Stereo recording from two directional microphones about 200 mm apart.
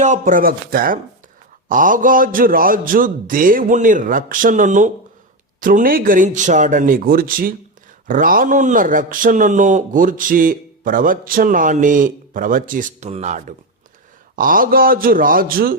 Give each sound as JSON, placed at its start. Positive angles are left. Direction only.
{"t": 0.0, "sound": "a man's voice", "side_deg": -40}
{"t": 14.3, "sound": "a man's voice", "side_deg": -45}